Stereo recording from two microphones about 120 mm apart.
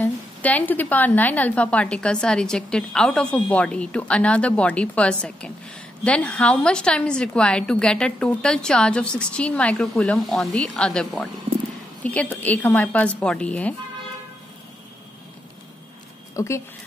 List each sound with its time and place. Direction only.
0.0 s a woman's voice: 15° left (ahead or behind)
16.3 s speech: 25° left (ahead or behind)